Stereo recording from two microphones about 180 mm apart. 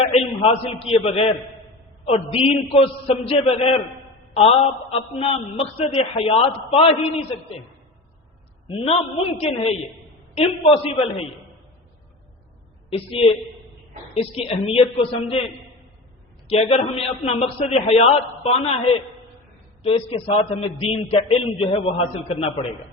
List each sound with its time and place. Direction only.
0.0 s a man's voice: 30° left (ahead or behind)
8.6 s a man's voice: 30° left (ahead or behind)
12.9 s a man's voice: 30° left (ahead or behind)
16.5 s a man's voice: 35° left (ahead or behind)
19.8 s a man's voice: 30° left (ahead or behind)